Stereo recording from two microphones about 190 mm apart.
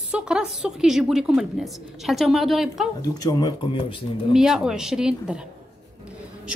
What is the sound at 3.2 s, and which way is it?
Speech, 20° left (ahead or behind).